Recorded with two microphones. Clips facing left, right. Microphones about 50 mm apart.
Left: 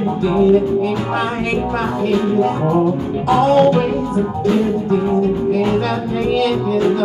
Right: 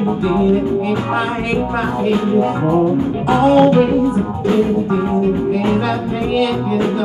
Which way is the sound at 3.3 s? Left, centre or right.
Centre.